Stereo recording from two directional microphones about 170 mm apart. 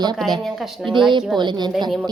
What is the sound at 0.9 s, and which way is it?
Speech, 30° right (ahead or behind).